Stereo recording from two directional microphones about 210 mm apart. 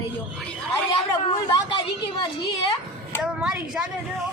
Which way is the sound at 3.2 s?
5° right (ahead or behind).